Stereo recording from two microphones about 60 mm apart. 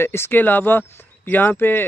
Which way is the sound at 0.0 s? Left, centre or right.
Left.